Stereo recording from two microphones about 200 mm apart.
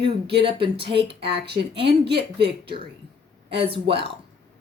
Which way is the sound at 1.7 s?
55° right (ahead or behind).